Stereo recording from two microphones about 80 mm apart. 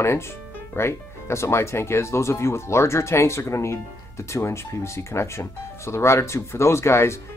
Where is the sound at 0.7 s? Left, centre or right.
Left.